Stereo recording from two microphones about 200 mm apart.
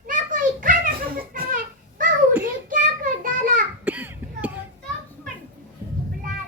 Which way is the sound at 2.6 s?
40° right (ahead or behind).